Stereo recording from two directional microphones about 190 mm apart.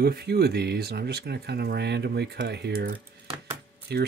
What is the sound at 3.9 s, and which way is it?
Speech, 60° right (ahead or behind).